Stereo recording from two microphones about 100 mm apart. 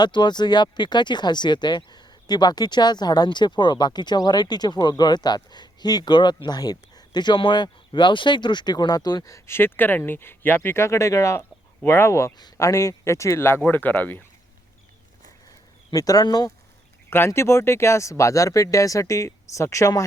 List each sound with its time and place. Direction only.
0.0 s speech: 45° left (ahead or behind); by 14.3 s 15° left (ahead or behind)
15.9 s speech: 40° left (ahead or behind)
17.1 s speech: 25° left (ahead or behind)